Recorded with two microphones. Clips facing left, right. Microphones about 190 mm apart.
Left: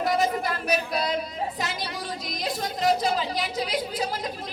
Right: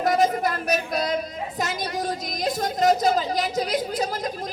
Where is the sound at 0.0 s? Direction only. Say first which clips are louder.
Right 3 dB; 45° right (ahead or behind).